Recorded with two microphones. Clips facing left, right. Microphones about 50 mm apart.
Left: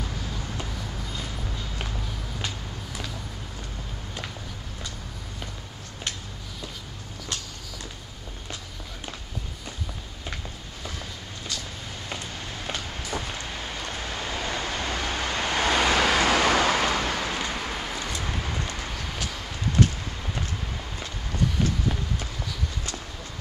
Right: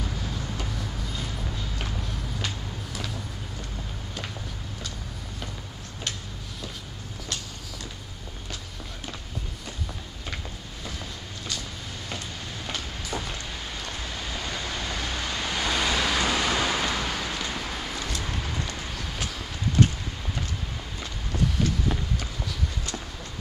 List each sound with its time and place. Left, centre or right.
0.6 s vehicle: centre
12.6 s vehicle: centre; by 15.9 s left
15.9 s vehicle: left
16.4 s vehicle: left
16.9 s vehicle: centre